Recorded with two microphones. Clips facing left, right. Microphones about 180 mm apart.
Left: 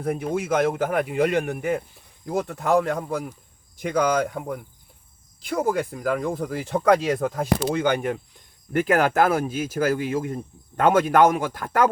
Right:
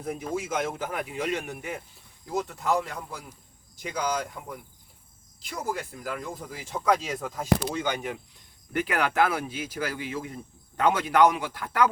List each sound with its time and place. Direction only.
0.0 s speech: 60° left (ahead or behind)